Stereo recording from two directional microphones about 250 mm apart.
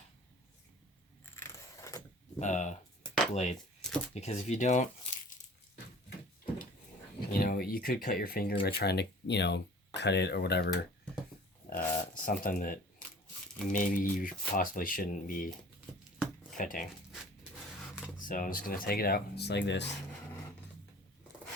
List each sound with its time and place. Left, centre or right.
1.2 s keys jangling: centre
2.4 s speech: left
3.8 s shuffling cards: centre
4.1 s speech: left
7.3 s speech: left
11.7 s a sound: left
13.7 s speech: left
16.6 s speech: left
18.3 s speech: left